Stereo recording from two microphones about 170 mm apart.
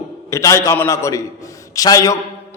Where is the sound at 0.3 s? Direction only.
20° left (ahead or behind).